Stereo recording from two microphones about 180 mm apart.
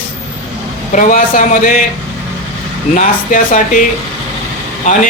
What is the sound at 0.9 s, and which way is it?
Speech, 50° left (ahead or behind).